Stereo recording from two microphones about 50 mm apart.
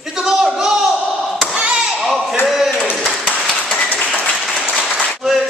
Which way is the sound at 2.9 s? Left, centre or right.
Centre.